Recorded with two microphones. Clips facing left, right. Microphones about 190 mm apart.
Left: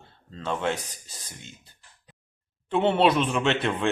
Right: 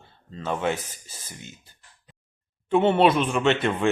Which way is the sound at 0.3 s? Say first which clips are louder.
Right 2 dB; 5° right (ahead or behind).